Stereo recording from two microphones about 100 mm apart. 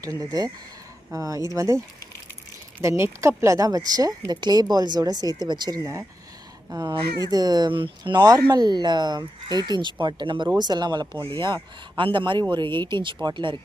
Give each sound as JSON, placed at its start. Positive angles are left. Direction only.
{"t": 0.0, "sound": "speech", "side_deg": -35}
{"t": 2.8, "sound": "speech", "side_deg": -30}
{"t": 5.8, "sound": "speech", "side_deg": -30}